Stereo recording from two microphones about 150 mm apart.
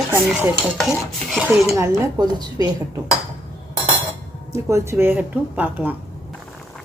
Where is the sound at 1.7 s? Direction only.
20° right (ahead or behind).